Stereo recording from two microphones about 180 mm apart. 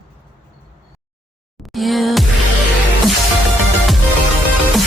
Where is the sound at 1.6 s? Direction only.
Centre (ahead or behind).